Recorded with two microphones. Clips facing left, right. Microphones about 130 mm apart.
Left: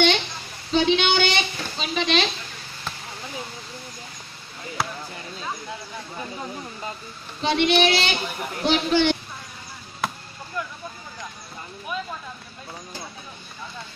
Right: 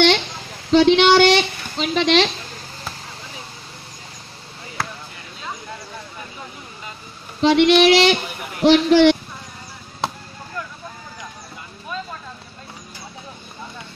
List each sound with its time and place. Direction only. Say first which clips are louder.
0.7 s speech: right 8 dB; 85° right
7.4 s child singing: right 7 dB; 90° right
10.0 s chop: right 3 dB; 25° right (ahead or behind)